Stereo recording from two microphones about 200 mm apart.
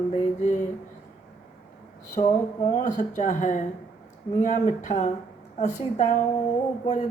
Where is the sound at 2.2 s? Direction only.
35° left (ahead or behind).